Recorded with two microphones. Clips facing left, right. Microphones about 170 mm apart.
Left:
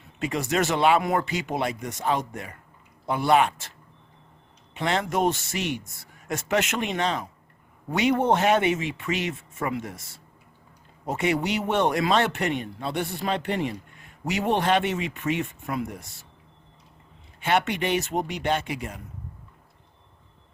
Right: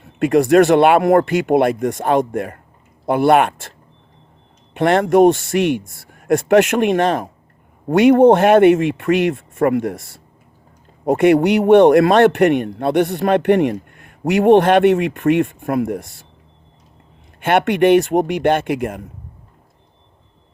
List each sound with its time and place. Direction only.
0.0 s a man's voice: 55° right (ahead or behind)
4.7 s a man's voice: 55° right (ahead or behind)
11.0 s a man's voice: 55° right (ahead or behind)
17.4 s a man's voice: 55° right (ahead or behind)